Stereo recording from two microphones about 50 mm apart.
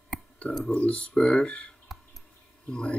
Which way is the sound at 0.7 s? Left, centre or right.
Left.